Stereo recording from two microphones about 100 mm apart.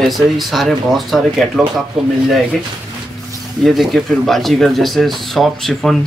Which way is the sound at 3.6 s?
Centre (ahead or behind).